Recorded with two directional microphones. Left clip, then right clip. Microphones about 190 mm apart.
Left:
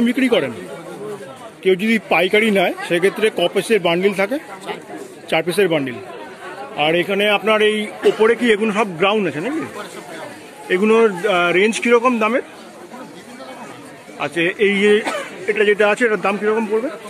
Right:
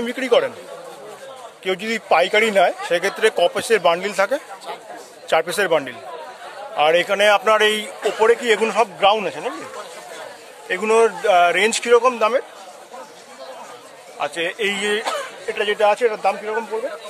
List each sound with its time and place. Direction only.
0.0 s speech: 15° right (ahead or behind)
1.6 s a man's voice: 15° right (ahead or behind)
10.7 s a man's voice: 20° right (ahead or behind)
14.1 s speech: 10° right (ahead or behind)
15.8 s speech: centre (ahead or behind)